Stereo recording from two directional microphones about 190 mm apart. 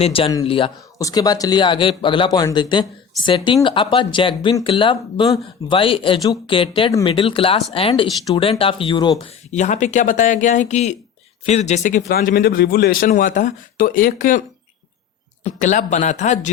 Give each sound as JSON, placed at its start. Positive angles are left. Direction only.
{"t": 0.0, "sound": "speech", "side_deg": 30}
{"t": 0.9, "sound": "speech", "side_deg": 20}
{"t": 9.5, "sound": "speech", "side_deg": 40}
{"t": 12.0, "sound": "speech", "side_deg": 55}
{"t": 15.4, "sound": "speech", "side_deg": 40}